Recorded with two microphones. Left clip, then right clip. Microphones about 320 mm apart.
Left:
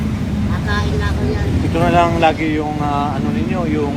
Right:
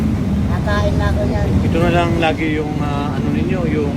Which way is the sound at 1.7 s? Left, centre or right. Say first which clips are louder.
Left 3 dB; centre.